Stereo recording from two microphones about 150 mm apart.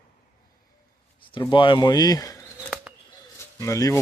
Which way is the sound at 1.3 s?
35° left (ahead or behind).